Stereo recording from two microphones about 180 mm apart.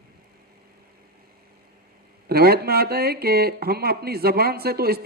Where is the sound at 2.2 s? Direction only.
60° right (ahead or behind).